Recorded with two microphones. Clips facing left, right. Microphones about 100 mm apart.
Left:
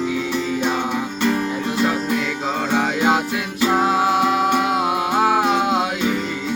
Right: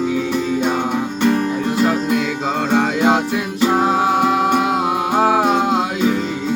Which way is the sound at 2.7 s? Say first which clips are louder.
Right 4 dB; 50° right (ahead or behind).